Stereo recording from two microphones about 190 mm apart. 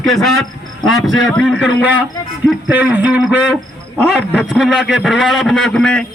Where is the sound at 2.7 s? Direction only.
10° right (ahead or behind).